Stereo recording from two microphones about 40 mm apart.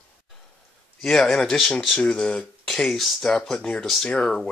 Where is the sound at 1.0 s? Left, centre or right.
Centre.